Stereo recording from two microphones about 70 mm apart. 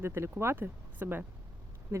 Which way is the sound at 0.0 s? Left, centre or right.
Right.